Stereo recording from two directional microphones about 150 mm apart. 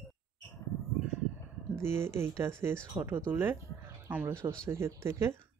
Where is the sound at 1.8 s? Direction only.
15° right (ahead or behind).